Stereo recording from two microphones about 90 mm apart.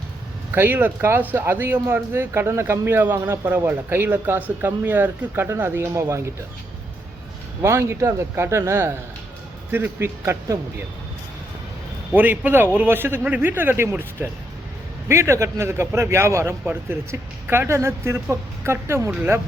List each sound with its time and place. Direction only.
0.5 s speech: 25° right (ahead or behind)
7.6 s speech: 30° right (ahead or behind)
12.1 s speech: 20° right (ahead or behind)